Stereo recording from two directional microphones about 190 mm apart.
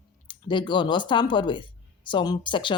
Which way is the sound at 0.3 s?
25° left (ahead or behind).